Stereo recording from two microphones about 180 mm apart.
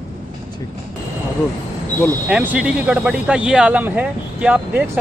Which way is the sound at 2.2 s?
5° right (ahead or behind).